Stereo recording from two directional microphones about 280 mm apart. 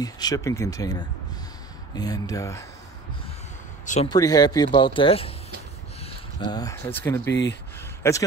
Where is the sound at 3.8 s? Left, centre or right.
Left.